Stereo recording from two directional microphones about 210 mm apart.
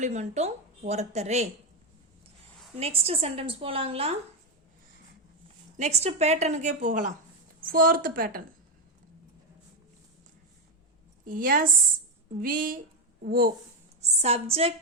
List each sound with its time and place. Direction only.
0.0 s speech: 30° right (ahead or behind)
2.7 s a woman's voice: 30° right (ahead or behind)
5.7 s a woman's voice: 30° right (ahead or behind)
11.3 s a woman's voice: 40° right (ahead or behind)
14.2 s a woman's voice: 30° right (ahead or behind)